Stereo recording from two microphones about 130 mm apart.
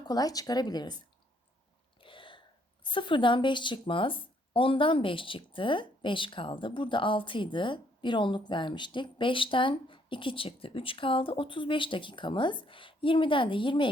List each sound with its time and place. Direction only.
0.0 s a woman's voice: 30° left (ahead or behind)
2.0 s a sound: 40° left (ahead or behind)
2.9 s a woman's voice: 40° left (ahead or behind)